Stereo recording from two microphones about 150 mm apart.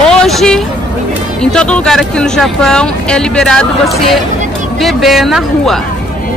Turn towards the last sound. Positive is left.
turn(degrees=0)  # may be behind; listen again after turning